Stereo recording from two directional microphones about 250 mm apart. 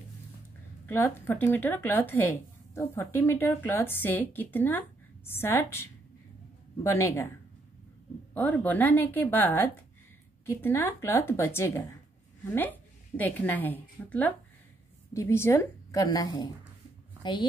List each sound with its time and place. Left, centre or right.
0.8 s speech: centre
8.4 s a woman's voice: centre